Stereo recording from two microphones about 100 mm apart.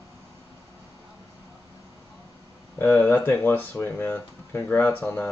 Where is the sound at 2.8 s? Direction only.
25° left (ahead or behind).